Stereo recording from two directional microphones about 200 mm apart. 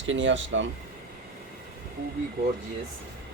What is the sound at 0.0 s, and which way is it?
Speech, 70° right (ahead or behind).